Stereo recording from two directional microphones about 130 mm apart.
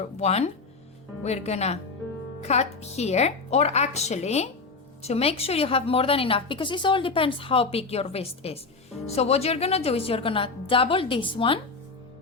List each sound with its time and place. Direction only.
0.2 s a woman's voice: 55° left (ahead or behind)